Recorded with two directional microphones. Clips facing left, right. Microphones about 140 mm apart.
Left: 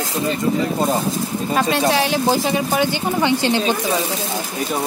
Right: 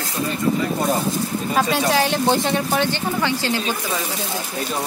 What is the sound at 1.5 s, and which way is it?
Speech, centre (ahead or behind).